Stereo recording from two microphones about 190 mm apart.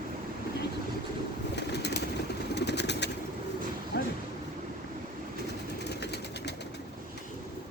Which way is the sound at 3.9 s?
65° left (ahead or behind).